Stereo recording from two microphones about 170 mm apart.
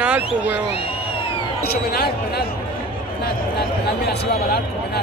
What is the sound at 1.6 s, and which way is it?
Speech, 70° left (ahead or behind).